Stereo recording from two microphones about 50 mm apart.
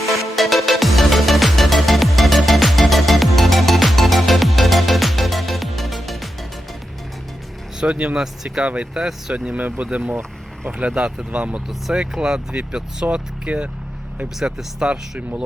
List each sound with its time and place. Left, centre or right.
0.3 s music: centre
7.8 s speech: right
9.0 s speech: centre
9.3 s speech: right
11.9 s speech: centre